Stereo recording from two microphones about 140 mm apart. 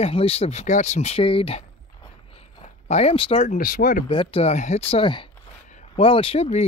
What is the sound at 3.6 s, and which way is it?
Speech, 75° left (ahead or behind).